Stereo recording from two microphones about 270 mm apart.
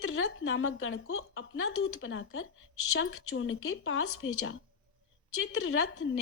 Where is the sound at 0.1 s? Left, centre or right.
Left.